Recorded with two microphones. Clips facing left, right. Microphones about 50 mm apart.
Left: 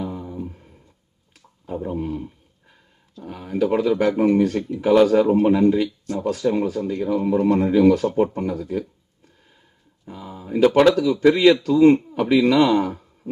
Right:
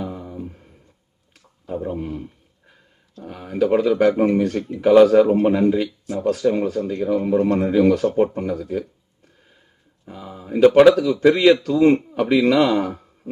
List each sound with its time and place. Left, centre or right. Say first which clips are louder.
0.0 s a sound: left 1 dB; centre
3.2 s speech: right 2 dB; centre
10.1 s speech: left 1 dB; centre